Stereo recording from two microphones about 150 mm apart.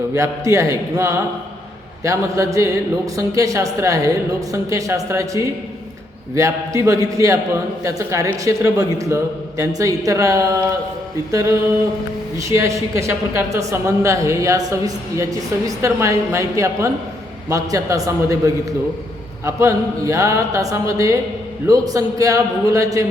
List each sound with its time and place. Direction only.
0.1 s a woman's voice: 20° right (ahead or behind)